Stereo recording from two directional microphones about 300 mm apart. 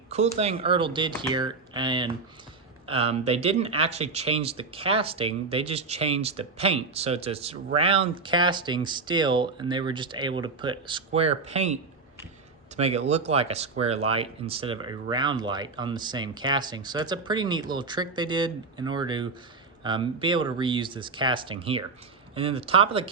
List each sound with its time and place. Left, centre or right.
0.1 s speech: right